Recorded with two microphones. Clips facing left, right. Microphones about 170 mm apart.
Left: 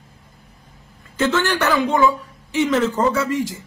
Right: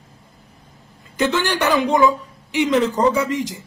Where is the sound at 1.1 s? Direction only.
15° right (ahead or behind).